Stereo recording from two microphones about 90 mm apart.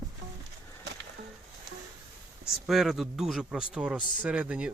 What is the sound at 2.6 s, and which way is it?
Speech, centre (ahead or behind).